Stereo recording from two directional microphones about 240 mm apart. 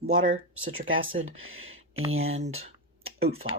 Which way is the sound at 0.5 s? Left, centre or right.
Right.